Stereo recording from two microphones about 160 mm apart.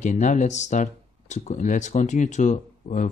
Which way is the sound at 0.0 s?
50° left (ahead or behind).